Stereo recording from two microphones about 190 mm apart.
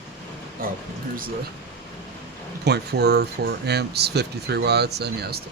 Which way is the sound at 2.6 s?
60° right (ahead or behind).